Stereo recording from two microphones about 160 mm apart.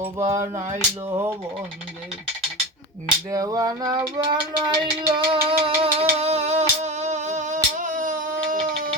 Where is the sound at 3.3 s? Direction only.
20° right (ahead or behind).